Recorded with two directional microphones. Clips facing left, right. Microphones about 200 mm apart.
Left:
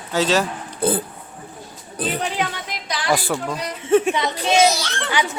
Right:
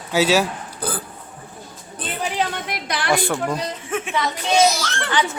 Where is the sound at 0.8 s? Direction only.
25° left (ahead or behind).